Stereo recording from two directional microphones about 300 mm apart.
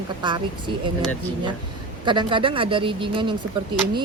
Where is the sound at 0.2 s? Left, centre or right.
Centre.